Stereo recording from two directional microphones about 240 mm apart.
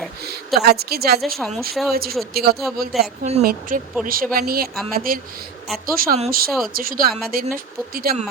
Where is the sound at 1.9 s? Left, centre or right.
Right.